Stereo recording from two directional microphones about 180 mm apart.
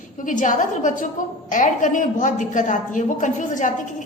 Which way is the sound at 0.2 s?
45° left (ahead or behind).